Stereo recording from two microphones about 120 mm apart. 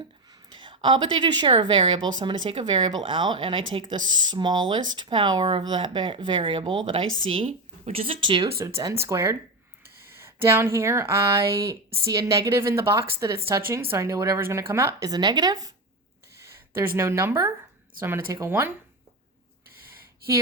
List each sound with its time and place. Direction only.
0.3 s a woman's voice: 40° right (ahead or behind)
8.8 s speech: 25° right (ahead or behind)
10.1 s a sound: 20° right (ahead or behind)
10.4 s speech: 20° right (ahead or behind)
16.4 s speech: 20° right (ahead or behind)
19.9 s a sound: 25° right (ahead or behind)